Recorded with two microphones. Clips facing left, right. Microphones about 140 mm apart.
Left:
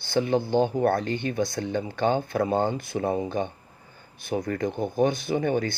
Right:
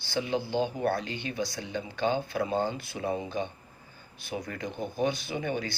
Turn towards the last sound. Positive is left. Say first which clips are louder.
# left 7 dB
turn(degrees=50)  # may be behind; listen again after turning